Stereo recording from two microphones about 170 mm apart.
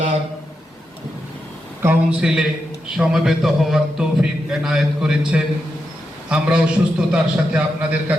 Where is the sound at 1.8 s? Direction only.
10° right (ahead or behind).